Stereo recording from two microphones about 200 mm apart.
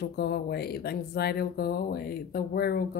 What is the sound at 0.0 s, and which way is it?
Speech, 55° left (ahead or behind).